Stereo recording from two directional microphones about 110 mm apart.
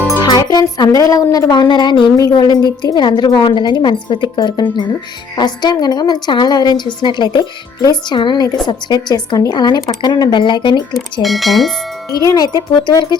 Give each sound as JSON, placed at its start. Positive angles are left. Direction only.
{"t": 0.2, "sound": "speech", "side_deg": 40}
{"t": 10.9, "sound": "speech", "side_deg": 0}
{"t": 12.2, "sound": "speech", "side_deg": 35}